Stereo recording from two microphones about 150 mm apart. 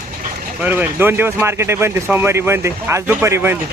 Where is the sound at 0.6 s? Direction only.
15° right (ahead or behind).